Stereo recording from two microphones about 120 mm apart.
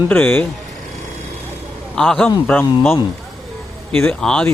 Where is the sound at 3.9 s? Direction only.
10° left (ahead or behind).